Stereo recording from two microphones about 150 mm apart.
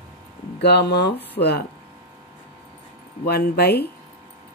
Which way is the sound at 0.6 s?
90° left.